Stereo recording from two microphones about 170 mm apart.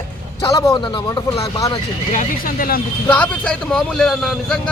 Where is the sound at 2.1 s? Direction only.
55° left (ahead or behind).